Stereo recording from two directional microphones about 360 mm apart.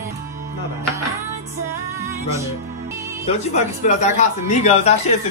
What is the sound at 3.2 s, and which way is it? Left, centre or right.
Speech, centre.